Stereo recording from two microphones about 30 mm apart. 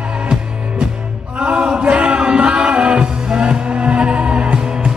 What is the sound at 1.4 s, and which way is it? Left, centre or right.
Chant, right.